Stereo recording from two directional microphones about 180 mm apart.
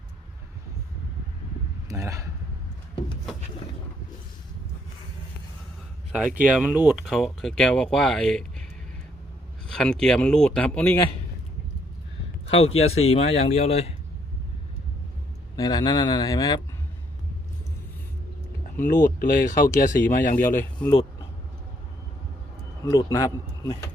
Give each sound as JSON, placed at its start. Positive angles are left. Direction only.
{"t": 1.9, "sound": "speech", "side_deg": -15}
{"t": 6.1, "sound": "speech", "side_deg": -5}
{"t": 9.6, "sound": "speech", "side_deg": 5}
{"t": 12.5, "sound": "speech", "side_deg": 35}
{"t": 15.5, "sound": "speech", "side_deg": 20}
{"t": 19.0, "sound": "speech", "side_deg": 50}
{"t": 20.7, "sound": "speech", "side_deg": 25}
{"t": 22.8, "sound": "speech", "side_deg": 20}